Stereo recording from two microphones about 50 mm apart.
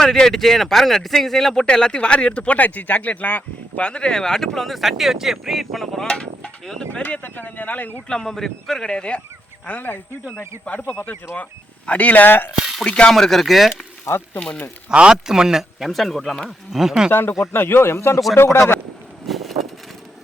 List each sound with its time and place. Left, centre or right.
0.0 s speech: centre
6.1 s speech: centre
7.0 s speech: left
8.0 s speech: centre
9.6 s speech: left
10.8 s speech: centre
11.9 s speech: left
12.8 s speech: centre
13.1 s speech: centre
14.3 s speech: centre
14.8 s speech: centre
15.9 s speech: centre
17.1 s speech: left
19.3 s vehicle: centre